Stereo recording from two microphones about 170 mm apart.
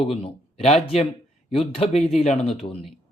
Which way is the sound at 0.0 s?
35° left (ahead or behind).